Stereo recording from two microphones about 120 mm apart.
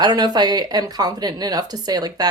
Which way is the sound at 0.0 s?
35° right (ahead or behind).